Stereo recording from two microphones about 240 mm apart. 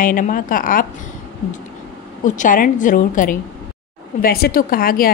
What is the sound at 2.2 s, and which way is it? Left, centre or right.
A woman's voice, left.